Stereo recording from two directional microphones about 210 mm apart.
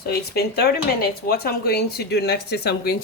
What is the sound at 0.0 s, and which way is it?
Speech, 50° left (ahead or behind).